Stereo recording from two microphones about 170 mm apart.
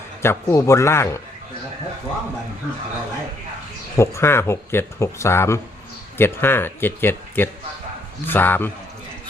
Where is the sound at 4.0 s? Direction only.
15° left (ahead or behind).